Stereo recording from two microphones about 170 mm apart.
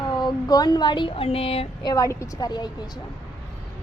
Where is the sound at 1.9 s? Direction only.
20° left (ahead or behind).